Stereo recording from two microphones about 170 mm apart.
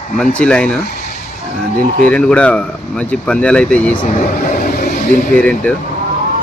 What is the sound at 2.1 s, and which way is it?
Speech, 5° left (ahead or behind).